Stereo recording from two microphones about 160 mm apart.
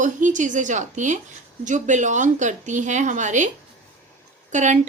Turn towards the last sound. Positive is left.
turn(degrees=-50)  # may be behind; listen again after turning